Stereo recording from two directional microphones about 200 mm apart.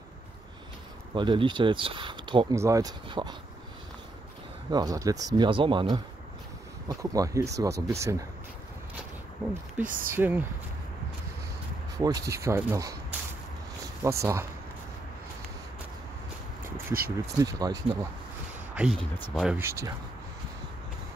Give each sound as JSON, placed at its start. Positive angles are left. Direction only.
{"t": 1.1, "sound": "speech", "side_deg": -25}
{"t": 4.6, "sound": "speech", "side_deg": -20}
{"t": 9.8, "sound": "speech", "side_deg": -45}
{"t": 10.1, "sound": "speech", "side_deg": -10}
{"t": 12.0, "sound": "speech", "side_deg": -20}
{"t": 14.0, "sound": "speech", "side_deg": -15}
{"t": 16.6, "sound": "a sound", "side_deg": -45}
{"t": 17.4, "sound": "speech", "side_deg": -20}
{"t": 18.8, "sound": "speech", "side_deg": 0}